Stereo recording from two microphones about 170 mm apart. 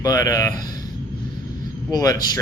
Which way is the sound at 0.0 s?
20° left (ahead or behind).